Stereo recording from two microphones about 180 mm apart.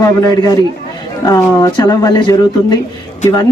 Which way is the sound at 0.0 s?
20° left (ahead or behind).